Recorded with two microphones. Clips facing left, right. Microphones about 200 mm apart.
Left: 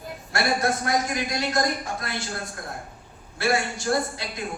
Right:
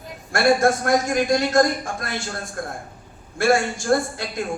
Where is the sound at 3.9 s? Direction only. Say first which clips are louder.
Right 5 dB; 50° right (ahead or behind).